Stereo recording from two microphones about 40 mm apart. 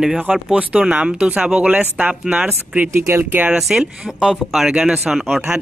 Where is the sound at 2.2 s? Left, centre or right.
Right.